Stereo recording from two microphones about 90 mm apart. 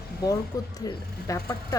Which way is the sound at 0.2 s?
45° left (ahead or behind).